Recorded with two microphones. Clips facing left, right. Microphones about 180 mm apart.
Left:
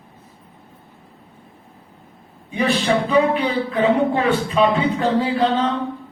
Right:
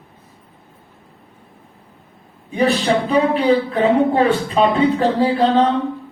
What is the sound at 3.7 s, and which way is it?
Speech, 35° right (ahead or behind).